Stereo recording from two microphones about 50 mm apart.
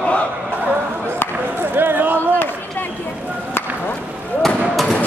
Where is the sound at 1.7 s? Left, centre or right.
Right.